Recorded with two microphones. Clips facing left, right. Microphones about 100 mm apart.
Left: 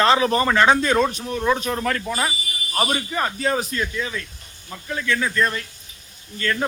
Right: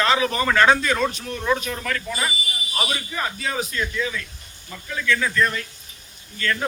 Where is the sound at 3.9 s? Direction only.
30° left (ahead or behind).